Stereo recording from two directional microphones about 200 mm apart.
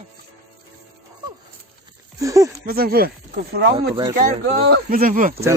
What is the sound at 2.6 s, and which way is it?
Speech, 50° right (ahead or behind).